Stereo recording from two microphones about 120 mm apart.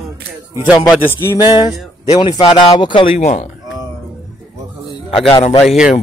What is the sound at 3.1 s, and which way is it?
Speech, 70° left (ahead or behind).